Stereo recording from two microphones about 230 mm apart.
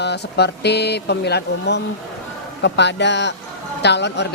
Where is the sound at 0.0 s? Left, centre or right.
Left.